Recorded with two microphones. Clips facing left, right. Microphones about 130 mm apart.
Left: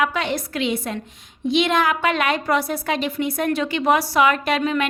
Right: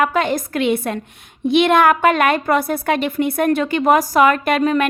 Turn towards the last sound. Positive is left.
turn(degrees=-45)  # may be behind; listen again after turning